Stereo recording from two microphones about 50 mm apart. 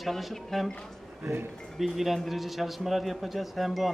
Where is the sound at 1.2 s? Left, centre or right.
Right.